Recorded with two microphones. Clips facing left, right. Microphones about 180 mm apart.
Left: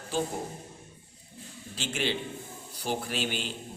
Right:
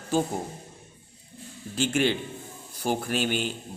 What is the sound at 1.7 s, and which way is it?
A man's voice, 50° right (ahead or behind).